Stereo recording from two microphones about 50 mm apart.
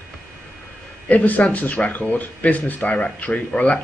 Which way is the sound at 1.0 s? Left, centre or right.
Left.